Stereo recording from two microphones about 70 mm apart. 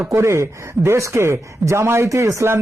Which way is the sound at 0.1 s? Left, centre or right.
Right.